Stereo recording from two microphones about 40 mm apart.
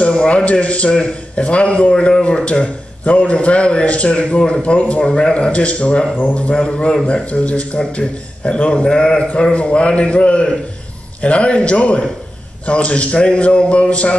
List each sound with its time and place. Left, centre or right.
0.0 s a sound: left
0.5 s a man's voice: left
7.3 s a man's voice: left